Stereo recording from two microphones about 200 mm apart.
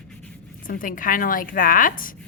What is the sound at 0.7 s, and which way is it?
A woman's voice, 45° left (ahead or behind).